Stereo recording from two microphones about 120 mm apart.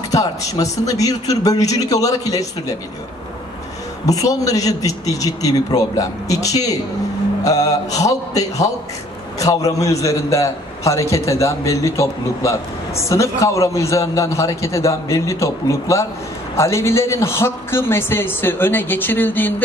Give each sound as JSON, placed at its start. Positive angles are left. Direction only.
{"t": 0.1, "sound": "a man's voice", "side_deg": 30}
{"t": 4.0, "sound": "a man's voice", "side_deg": 30}